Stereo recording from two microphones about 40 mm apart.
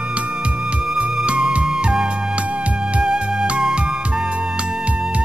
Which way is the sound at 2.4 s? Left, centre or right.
Right.